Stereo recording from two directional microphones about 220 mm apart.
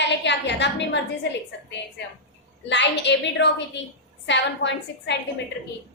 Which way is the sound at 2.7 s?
55° left (ahead or behind).